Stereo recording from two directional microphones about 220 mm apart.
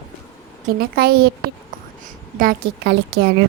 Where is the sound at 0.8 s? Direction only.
45° right (ahead or behind).